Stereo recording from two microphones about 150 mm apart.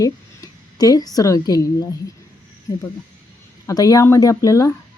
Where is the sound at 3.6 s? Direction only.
25° left (ahead or behind).